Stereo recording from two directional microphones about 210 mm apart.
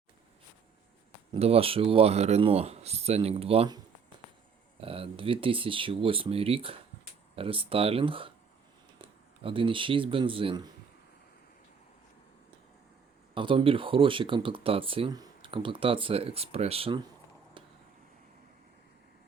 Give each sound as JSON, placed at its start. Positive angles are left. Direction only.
{"t": 1.3, "sound": "speech", "side_deg": -30}
{"t": 4.8, "sound": "speech", "side_deg": -25}
{"t": 13.3, "sound": "speech", "side_deg": -25}